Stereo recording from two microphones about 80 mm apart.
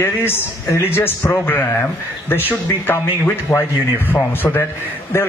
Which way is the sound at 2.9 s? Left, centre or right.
Left.